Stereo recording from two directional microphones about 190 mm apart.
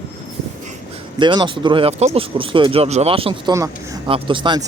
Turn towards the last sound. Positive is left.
turn(degrees=-25)  # may be behind; listen again after turning